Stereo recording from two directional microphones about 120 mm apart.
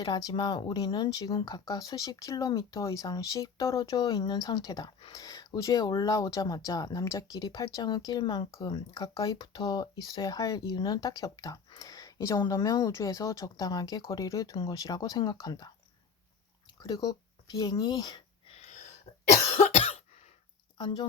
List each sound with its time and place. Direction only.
0.0 s speech: 35° left (ahead or behind)
16.8 s speech: 30° left (ahead or behind)
19.5 s cough: 65° left (ahead or behind)
20.7 s speech: 40° left (ahead or behind)